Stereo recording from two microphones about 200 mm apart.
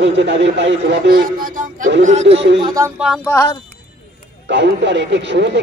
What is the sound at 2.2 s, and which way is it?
Speech, 65° right (ahead or behind).